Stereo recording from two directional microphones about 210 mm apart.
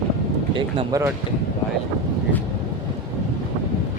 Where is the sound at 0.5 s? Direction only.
20° right (ahead or behind).